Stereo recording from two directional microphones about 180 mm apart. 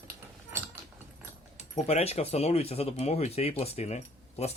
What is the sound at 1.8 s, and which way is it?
Speech, 35° left (ahead or behind).